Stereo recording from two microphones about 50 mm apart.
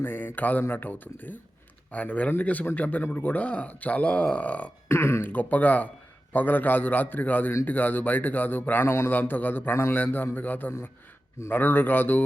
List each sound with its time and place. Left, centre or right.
0.0 s speech: left
4.9 s speech: left
5.2 s speech: left
8.9 s speech: left
9.1 s a man's voice: left